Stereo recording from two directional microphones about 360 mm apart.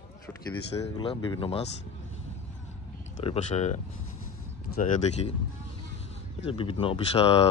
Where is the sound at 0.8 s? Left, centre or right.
Centre.